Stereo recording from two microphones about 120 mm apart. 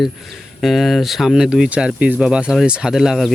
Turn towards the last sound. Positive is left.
turn(degrees=-5)  # may be behind; listen again after turning